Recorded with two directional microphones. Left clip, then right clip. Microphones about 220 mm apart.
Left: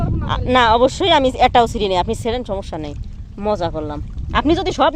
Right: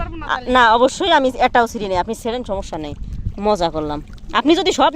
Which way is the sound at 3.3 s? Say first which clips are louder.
Right 3 dB; 15° right (ahead or behind).